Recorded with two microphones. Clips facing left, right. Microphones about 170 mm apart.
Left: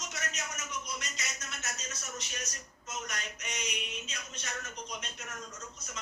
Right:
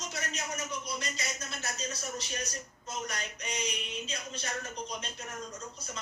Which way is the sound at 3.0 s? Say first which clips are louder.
Right 3 dB; 30° right (ahead or behind).